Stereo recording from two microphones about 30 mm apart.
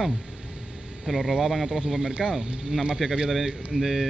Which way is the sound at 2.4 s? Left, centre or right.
Right.